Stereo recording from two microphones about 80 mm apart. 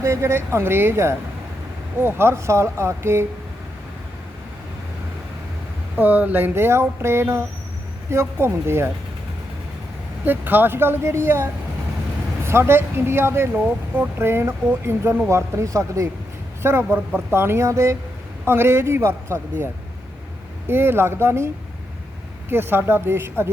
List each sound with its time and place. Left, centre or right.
0.0 s speech: right
6.0 s speech: right
10.2 s speech: right
20.7 s speech: right